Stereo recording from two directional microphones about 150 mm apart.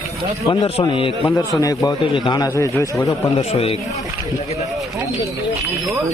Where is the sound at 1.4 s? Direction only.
25° left (ahead or behind).